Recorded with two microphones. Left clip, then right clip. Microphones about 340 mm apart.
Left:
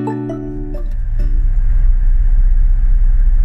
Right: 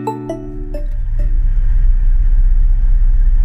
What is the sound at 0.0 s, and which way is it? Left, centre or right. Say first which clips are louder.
Music: even; centre.